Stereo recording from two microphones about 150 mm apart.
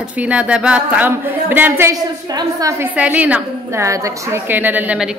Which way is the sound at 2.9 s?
10° right (ahead or behind).